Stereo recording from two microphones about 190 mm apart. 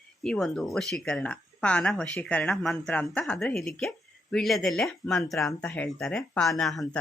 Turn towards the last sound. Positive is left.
turn(degrees=0)  # may be behind; listen again after turning